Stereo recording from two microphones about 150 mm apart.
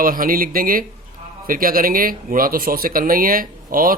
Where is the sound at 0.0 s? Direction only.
70° right (ahead or behind).